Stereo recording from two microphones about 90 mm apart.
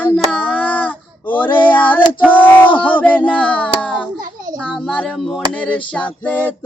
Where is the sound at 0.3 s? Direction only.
15° left (ahead or behind).